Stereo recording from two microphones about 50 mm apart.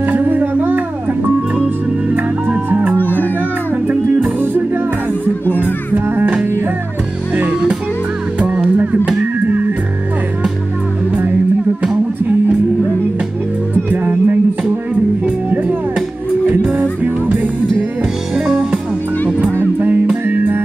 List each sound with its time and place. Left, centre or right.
0.0 s a sound: right
2.4 s music: right
3.0 s music: left
3.8 s music: right
13.8 s music: right
17.0 s music: right
18.3 s music: centre
20.2 s music: right